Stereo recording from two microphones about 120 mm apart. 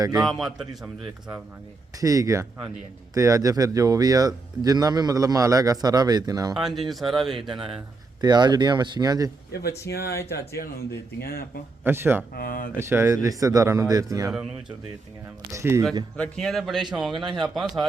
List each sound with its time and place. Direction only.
0.0 s speech: 30° right (ahead or behind)
0.3 s speech: centre (ahead or behind)
2.0 s speech: 30° right (ahead or behind)
6.5 s speech: centre (ahead or behind)
8.2 s speech: 35° right (ahead or behind)
9.7 s speech: 25° left (ahead or behind)
11.8 s speech: 20° right (ahead or behind)
15.5 s speech: 25° right (ahead or behind)
16.1 s speech: 10° left (ahead or behind)
17.1 s speech: 45° right (ahead or behind)
17.4 s speech: centre (ahead or behind)